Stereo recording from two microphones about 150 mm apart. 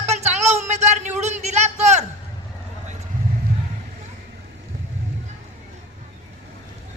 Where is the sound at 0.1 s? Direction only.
45° right (ahead or behind).